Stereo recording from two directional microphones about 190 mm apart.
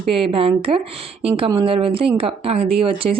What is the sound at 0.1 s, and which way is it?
A woman's voice, 30° right (ahead or behind).